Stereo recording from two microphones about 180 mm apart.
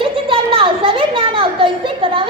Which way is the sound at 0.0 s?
30° right (ahead or behind).